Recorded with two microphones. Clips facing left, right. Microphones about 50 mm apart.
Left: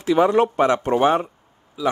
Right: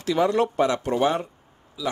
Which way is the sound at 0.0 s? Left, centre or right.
Left.